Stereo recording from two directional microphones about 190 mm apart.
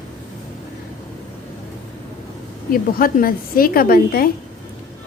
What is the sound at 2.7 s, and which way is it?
A woman's voice, 50° left (ahead or behind).